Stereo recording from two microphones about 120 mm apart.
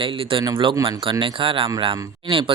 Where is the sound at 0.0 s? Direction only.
45° right (ahead or behind).